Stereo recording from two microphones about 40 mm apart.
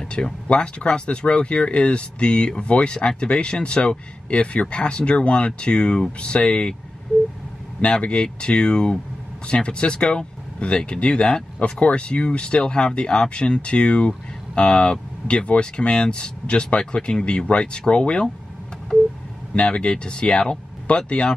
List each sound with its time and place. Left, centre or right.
0.0 s speech: left
8.0 s speech: left
19.5 s speech: left